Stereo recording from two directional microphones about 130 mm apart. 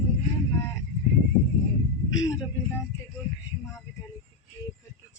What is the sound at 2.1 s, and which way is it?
Speech, 25° left (ahead or behind).